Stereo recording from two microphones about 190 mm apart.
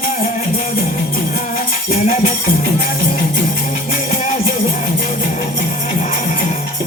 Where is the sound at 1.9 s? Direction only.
40° left (ahead or behind).